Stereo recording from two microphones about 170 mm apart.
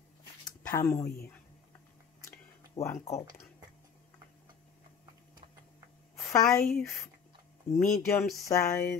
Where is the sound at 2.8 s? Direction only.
15° left (ahead or behind).